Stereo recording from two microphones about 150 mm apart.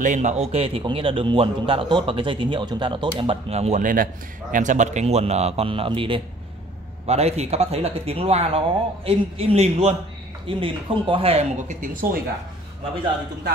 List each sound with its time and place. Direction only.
0.0 s a man's voice: 55° right (ahead or behind); by 6.2 s 35° right (ahead or behind)
7.1 s a man's voice: 45° right (ahead or behind); by 12.2 s 70° right (ahead or behind)